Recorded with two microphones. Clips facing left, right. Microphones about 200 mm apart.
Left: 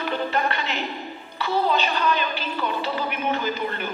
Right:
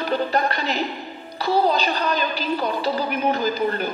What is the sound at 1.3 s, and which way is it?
A woman's voice, 40° right (ahead or behind).